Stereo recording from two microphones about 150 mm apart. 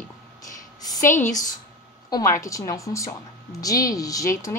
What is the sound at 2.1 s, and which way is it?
Speech, 20° left (ahead or behind).